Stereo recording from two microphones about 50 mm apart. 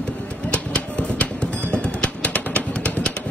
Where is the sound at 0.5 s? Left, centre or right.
Left.